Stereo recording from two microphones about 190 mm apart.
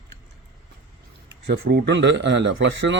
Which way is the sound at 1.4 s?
60° right (ahead or behind).